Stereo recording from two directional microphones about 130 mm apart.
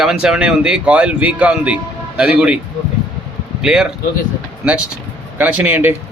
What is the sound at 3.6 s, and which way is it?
Speech, 5° right (ahead or behind).